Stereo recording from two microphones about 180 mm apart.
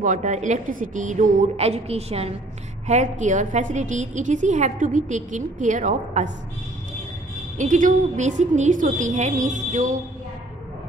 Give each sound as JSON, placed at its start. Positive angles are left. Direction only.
{"t": 0.0, "sound": "a woman's voice", "side_deg": -45}
{"t": 7.5, "sound": "a woman's voice", "side_deg": -45}